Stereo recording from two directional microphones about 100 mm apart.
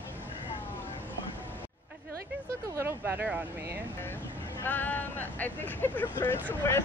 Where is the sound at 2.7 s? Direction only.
20° right (ahead or behind).